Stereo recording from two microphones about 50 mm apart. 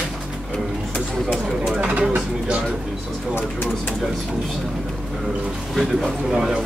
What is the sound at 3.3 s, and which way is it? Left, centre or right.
Speech, left.